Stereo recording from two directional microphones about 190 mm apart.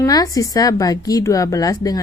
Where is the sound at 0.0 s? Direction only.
20° left (ahead or behind).